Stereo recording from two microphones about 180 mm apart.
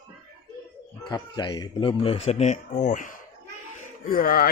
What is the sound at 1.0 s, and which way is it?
Speech, 25° left (ahead or behind).